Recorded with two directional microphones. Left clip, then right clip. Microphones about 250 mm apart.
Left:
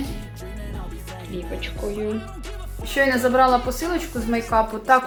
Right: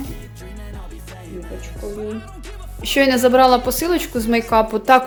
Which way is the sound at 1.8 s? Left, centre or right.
Centre.